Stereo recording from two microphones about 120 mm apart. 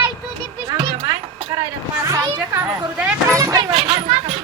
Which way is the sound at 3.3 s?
30° right (ahead or behind).